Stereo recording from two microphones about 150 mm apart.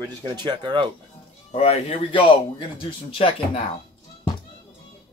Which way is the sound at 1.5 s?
40° left (ahead or behind).